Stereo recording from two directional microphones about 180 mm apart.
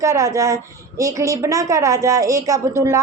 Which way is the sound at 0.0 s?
20° right (ahead or behind).